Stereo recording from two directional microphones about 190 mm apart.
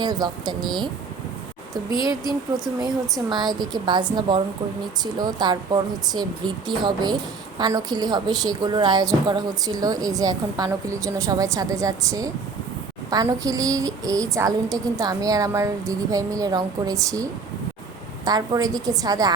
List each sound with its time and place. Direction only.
0.0 s a woman's voice: 20° right (ahead or behind)
2.8 s a woman's voice: 25° right (ahead or behind)
18.3 s a woman's voice: 20° right (ahead or behind)